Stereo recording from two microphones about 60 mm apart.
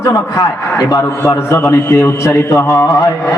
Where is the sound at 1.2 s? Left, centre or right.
Left.